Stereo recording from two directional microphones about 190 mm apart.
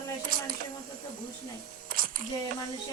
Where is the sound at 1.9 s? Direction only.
50° right (ahead or behind).